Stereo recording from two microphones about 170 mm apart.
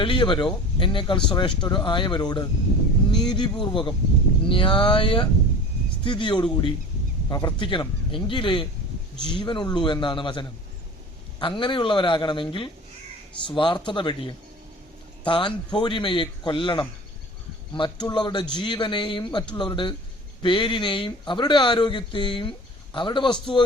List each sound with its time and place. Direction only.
0.0 s a man's voice: 30° left (ahead or behind)